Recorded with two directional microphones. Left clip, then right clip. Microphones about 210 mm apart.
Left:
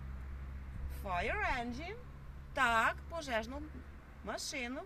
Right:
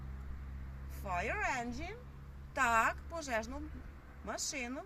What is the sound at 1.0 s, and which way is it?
Speech, 5° left (ahead or behind).